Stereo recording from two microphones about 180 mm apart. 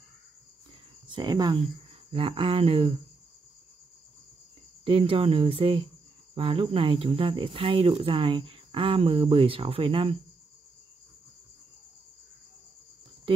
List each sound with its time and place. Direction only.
1.0 s speech: 25° right (ahead or behind)
4.8 s speech: 30° right (ahead or behind)